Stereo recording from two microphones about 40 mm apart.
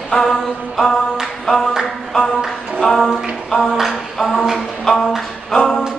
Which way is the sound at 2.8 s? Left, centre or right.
Centre.